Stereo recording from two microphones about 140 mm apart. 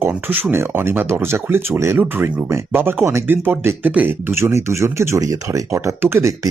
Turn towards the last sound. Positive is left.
turn(degrees=-20)  # may be behind; listen again after turning